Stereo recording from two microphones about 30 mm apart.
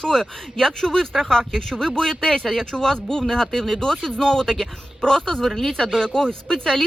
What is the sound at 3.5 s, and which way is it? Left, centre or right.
Speech, centre.